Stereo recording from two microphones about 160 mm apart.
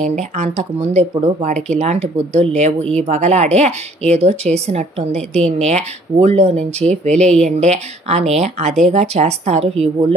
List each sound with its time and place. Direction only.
0.1 s speech: 45° right (ahead or behind)